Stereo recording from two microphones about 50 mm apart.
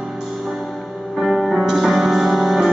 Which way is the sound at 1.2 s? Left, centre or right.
Centre.